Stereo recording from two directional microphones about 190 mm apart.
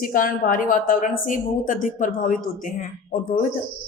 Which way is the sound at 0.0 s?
45° left (ahead or behind).